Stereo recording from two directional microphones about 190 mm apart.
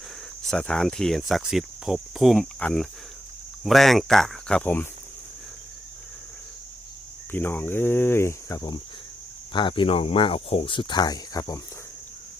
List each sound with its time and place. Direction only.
0.5 s cricket: 5° left (ahead or behind)
7.3 s cricket: 10° left (ahead or behind)
9.5 s speech: 25° left (ahead or behind)